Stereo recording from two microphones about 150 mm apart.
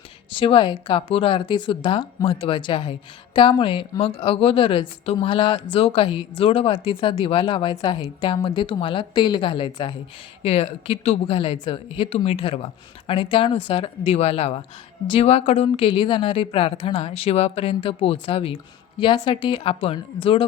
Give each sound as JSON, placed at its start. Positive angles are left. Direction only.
{"t": 0.3, "sound": "a woman's voice", "side_deg": 35}